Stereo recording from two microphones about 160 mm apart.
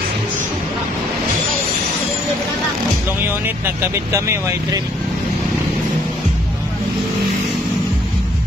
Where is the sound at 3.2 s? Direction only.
15° right (ahead or behind).